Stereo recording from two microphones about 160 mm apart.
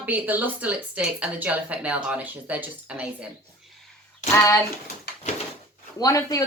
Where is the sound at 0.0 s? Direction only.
10° right (ahead or behind).